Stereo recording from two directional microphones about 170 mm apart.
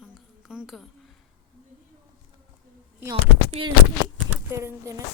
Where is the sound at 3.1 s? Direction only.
35° right (ahead or behind).